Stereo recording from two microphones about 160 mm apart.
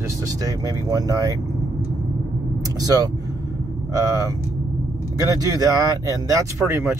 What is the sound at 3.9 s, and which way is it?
Speech, 20° right (ahead or behind).